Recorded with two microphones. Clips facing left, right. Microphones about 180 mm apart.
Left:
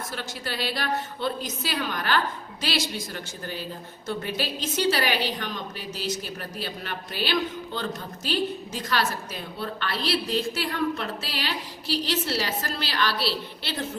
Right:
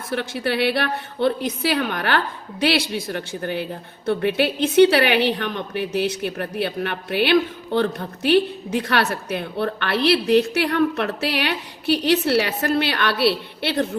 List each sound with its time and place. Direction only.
0.1 s a woman's voice: 60° right (ahead or behind)